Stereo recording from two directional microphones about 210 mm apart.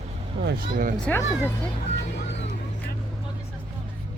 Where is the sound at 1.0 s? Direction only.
10° left (ahead or behind).